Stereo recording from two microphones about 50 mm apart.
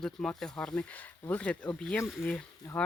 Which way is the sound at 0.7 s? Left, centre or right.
Left.